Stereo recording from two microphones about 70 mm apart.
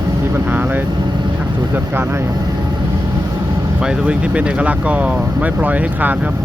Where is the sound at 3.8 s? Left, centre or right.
Centre.